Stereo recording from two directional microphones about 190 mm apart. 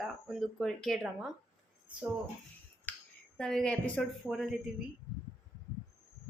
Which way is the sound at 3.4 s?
5° left (ahead or behind).